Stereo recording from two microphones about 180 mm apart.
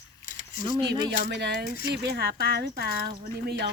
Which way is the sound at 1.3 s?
70° right (ahead or behind).